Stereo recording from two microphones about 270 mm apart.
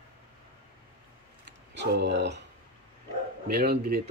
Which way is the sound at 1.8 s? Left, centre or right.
Right.